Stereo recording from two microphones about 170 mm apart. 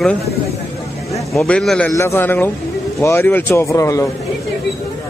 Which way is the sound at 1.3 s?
5° left (ahead or behind).